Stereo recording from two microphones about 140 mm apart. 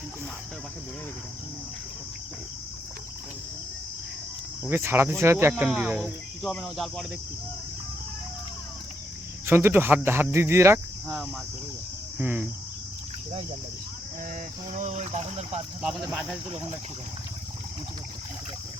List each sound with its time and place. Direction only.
4.6 s speech: 15° right (ahead or behind)
5.6 s speech: 5° right (ahead or behind)
9.5 s speech: 15° right (ahead or behind)
12.2 s speech: 15° right (ahead or behind)
14.7 s speech: 55° right (ahead or behind)
15.8 s speech: centre (ahead or behind)